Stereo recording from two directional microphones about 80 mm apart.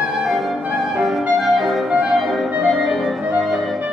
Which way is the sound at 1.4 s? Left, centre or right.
Centre.